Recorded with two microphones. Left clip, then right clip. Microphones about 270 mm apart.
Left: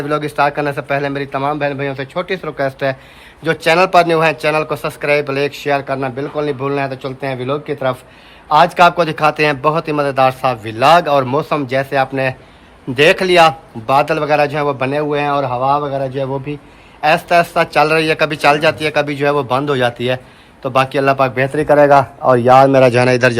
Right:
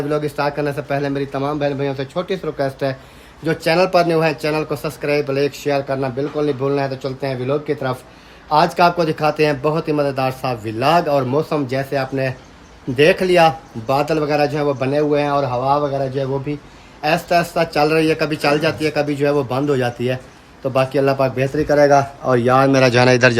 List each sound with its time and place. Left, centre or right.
0.1 s a man's voice: centre
21.7 s a man's voice: centre